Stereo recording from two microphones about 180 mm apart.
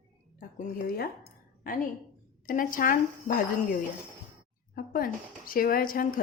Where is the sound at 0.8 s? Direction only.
55° left (ahead or behind).